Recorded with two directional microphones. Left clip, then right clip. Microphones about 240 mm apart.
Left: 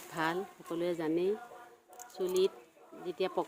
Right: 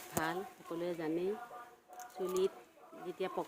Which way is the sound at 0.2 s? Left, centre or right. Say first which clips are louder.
Left 4 dB; left.